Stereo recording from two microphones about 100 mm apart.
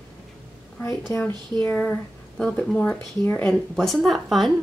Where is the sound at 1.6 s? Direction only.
10° left (ahead or behind).